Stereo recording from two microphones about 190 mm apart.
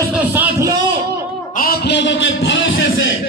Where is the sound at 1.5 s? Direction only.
55° left (ahead or behind); by 3.0 s 85° left.